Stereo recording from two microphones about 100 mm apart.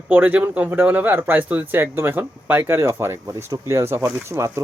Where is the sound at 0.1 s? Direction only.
15° right (ahead or behind).